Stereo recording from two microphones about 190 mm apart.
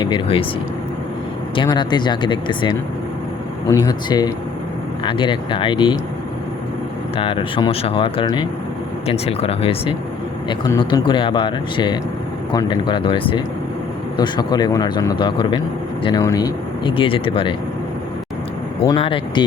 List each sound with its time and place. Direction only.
0.0 s speech: 25° left (ahead or behind)
1.5 s speech: 25° left (ahead or behind)
7.2 s speech: 30° left (ahead or behind)
18.9 s speech: 30° left (ahead or behind)